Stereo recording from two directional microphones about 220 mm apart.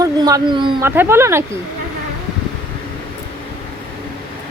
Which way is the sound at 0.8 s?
10° right (ahead or behind).